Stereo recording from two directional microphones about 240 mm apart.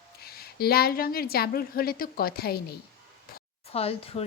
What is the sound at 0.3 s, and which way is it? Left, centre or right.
A woman's voice, left.